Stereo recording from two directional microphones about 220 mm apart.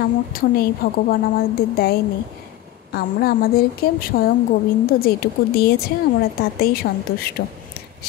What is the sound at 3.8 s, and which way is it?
A woman's voice, 40° left (ahead or behind).